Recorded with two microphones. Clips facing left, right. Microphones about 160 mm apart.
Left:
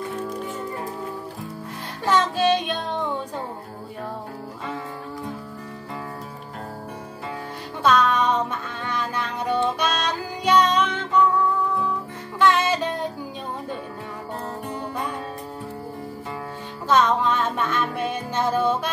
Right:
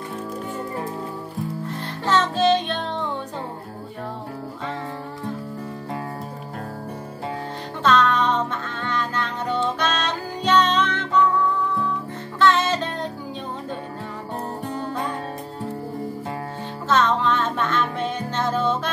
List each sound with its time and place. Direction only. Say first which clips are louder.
2.0 s music: right 1 dB; 10° left (ahead or behind)
7.8 s music: even; 10° left (ahead or behind)
12.4 s music: even; 10° left (ahead or behind)
16.9 s music: even; 10° left (ahead or behind)